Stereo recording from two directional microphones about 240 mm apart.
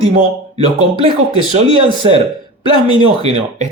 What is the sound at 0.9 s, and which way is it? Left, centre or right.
Speech, centre.